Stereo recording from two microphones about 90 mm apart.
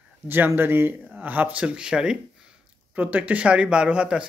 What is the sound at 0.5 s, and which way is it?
Speech, 25° right (ahead or behind).